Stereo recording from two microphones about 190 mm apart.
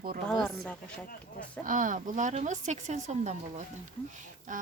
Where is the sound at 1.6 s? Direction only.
45° right (ahead or behind).